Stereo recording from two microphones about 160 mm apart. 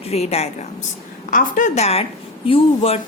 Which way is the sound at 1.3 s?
55° left (ahead or behind).